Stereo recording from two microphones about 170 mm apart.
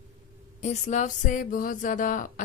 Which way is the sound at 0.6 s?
45° left (ahead or behind).